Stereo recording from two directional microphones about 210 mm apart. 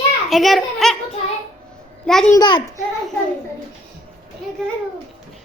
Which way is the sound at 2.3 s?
20° left (ahead or behind).